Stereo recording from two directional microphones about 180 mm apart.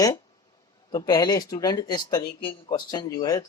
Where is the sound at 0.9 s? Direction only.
20° left (ahead or behind).